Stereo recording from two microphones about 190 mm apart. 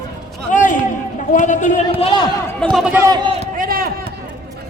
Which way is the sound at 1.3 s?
40° left (ahead or behind).